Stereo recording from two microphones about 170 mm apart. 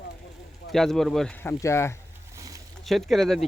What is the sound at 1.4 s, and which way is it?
Speech, 15° left (ahead or behind).